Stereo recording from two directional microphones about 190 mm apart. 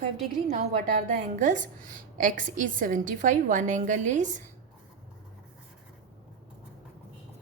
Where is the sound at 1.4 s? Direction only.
40° right (ahead or behind).